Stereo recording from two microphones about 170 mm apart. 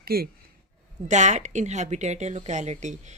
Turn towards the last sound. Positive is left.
turn(degrees=-45)  # may be behind; listen again after turning